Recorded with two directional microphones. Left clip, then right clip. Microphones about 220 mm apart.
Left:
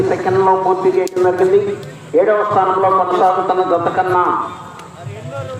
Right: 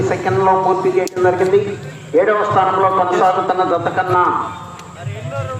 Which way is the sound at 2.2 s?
15° right (ahead or behind).